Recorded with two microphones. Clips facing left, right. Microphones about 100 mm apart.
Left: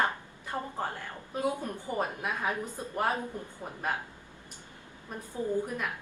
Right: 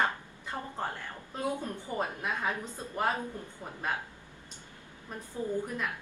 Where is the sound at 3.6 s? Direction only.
20° left (ahead or behind).